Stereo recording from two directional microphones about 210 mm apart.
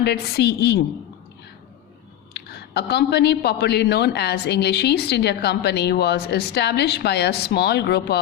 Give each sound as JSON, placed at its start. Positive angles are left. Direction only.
{"t": 0.0, "sound": "a woman's voice", "side_deg": 50}
{"t": 2.3, "sound": "a woman's voice", "side_deg": 50}